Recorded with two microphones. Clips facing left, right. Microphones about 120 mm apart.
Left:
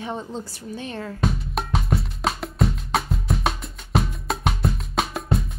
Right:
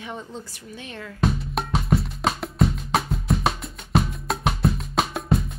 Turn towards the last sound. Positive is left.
turn(degrees=0)  # may be behind; listen again after turning